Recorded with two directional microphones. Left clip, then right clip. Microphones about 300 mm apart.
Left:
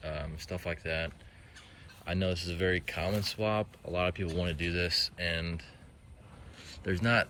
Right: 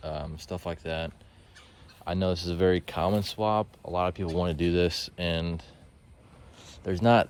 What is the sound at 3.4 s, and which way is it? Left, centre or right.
Speech, centre.